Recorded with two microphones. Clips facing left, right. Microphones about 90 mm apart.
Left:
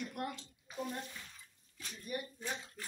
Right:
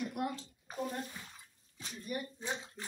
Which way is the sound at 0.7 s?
40° right (ahead or behind).